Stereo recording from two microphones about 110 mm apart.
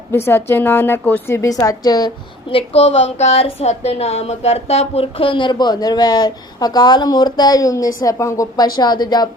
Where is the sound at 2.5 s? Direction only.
60° left (ahead or behind).